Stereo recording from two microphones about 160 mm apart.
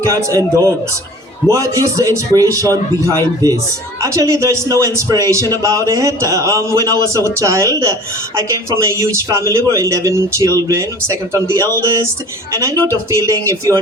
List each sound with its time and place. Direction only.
0.0 s a man's voice: 20° right (ahead or behind)